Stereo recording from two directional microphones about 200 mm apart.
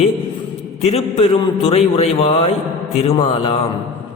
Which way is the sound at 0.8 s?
30° left (ahead or behind).